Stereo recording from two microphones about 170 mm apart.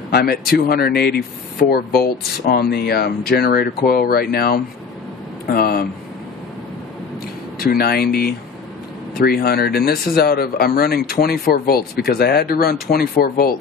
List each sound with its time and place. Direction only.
0.1 s speech: 65° left (ahead or behind)
7.5 s speech: 65° left (ahead or behind)